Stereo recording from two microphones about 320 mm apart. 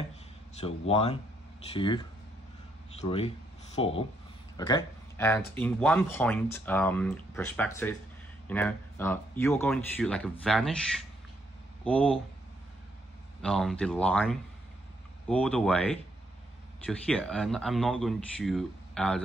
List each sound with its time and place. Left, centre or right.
0.6 s speech: centre
3.0 s speech: centre
13.4 s speech: centre